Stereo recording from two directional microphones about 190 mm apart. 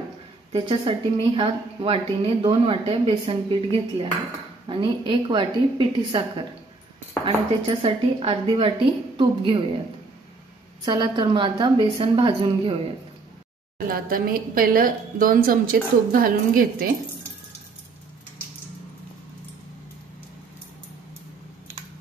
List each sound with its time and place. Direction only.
0.5 s a woman's voice: 30° right (ahead or behind)
7.8 s a woman's voice: 30° right (ahead or behind)
10.9 s a woman's voice: 25° right (ahead or behind)
13.7 s a woman's voice: 50° right (ahead or behind)